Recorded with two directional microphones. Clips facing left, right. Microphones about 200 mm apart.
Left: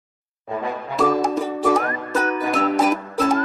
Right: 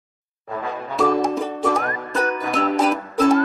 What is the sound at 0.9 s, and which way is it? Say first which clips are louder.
Music: even; centre (ahead or behind).